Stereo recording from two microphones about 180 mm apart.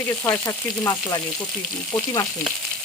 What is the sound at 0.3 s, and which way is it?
Frying, 20° left (ahead or behind).